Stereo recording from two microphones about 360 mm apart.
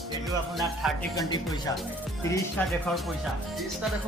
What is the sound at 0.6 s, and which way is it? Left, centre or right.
Speech, centre.